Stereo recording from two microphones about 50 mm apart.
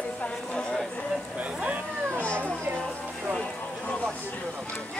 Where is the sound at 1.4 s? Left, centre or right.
Right.